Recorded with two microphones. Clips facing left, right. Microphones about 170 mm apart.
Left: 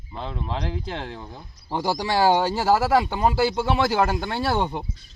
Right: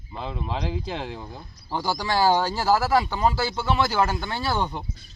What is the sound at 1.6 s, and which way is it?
Speech, 20° left (ahead or behind).